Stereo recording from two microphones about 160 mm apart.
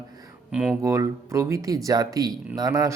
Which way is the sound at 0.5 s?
5° right (ahead or behind).